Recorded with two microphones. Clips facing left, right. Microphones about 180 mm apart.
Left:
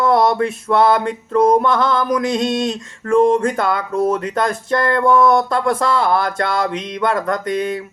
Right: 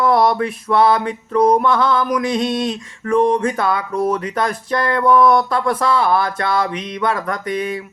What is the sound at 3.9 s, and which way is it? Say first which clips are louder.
Speech: left 1 dB; 25° left (ahead or behind).